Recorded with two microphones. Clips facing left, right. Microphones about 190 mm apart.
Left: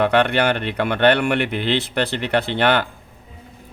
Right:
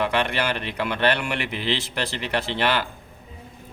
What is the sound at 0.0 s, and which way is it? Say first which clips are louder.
A man's voice: left 7 dB; 60° left (ahead or behind).